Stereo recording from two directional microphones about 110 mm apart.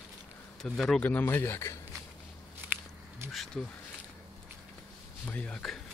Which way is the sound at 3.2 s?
25° right (ahead or behind).